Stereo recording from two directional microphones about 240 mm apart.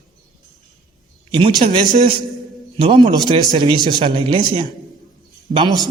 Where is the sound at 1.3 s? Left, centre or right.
Right.